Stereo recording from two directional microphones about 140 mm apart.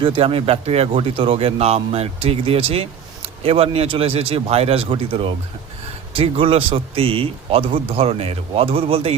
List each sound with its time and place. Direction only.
0.0 s a man's voice: 40° right (ahead or behind)